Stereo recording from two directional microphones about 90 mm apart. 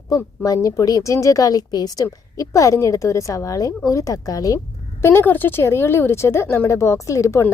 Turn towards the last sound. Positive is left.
turn(degrees=30)  # may be behind; listen again after turning